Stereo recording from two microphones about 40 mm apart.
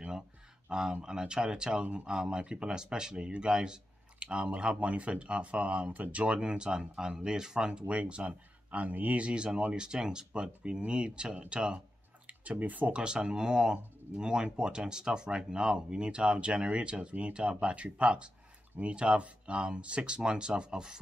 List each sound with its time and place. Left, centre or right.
0.7 s speech: centre; by 9.3 s right
9.3 s speech: right
12.3 s speech: right
12.9 s speech: right